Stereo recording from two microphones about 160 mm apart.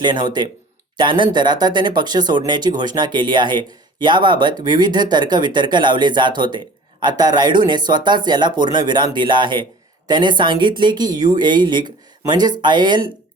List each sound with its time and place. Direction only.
0.0 s speech: 30° right (ahead or behind)